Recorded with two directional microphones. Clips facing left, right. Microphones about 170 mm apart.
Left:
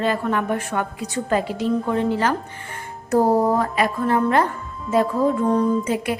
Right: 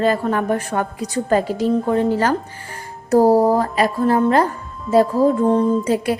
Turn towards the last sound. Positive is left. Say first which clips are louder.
# right 3 dB
turn(degrees=-35)  # may be behind; listen again after turning